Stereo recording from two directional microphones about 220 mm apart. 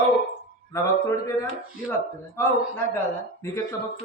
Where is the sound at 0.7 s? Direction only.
15° left (ahead or behind).